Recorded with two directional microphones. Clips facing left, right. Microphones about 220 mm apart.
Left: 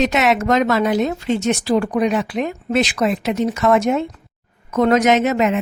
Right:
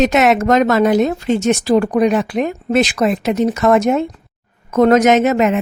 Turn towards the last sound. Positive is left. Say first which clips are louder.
# right 3 dB
turn(degrees=-50)  # may be behind; listen again after turning